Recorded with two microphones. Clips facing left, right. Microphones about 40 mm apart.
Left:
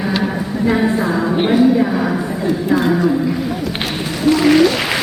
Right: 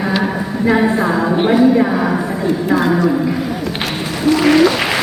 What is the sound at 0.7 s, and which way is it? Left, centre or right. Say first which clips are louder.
Speech: right 2 dB; centre.